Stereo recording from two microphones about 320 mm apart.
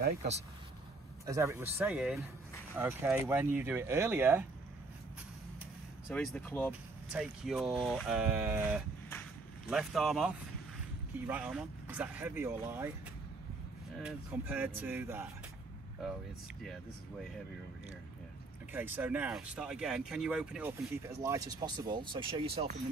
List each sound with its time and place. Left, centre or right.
0.0 s speech: right
1.2 s speech: centre
6.0 s speech: centre
14.0 s speech: centre
18.7 s speech: centre